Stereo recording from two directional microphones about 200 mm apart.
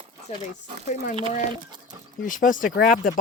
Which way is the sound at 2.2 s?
40° left (ahead or behind).